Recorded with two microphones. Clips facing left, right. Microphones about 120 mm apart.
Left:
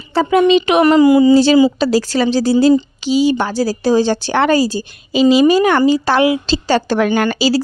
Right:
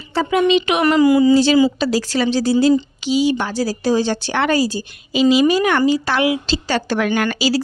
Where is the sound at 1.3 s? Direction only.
35° left (ahead or behind).